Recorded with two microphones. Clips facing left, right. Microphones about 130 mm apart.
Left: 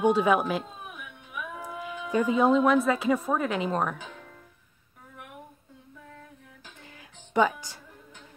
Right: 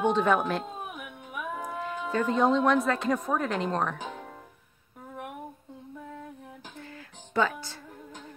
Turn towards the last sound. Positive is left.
turn(degrees=15)  # may be behind; listen again after turning